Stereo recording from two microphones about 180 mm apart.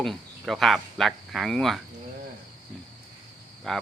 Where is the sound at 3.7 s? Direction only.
5° left (ahead or behind).